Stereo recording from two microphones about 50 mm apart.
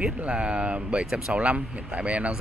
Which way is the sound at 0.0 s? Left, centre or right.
Right.